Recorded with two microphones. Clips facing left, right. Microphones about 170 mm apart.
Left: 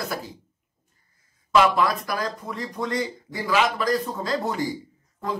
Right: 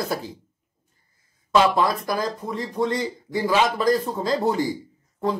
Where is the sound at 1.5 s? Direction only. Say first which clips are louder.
Right 1 dB; 25° right (ahead or behind).